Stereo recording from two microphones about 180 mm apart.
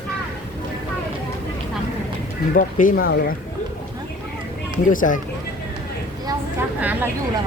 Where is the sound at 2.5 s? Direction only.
50° left (ahead or behind).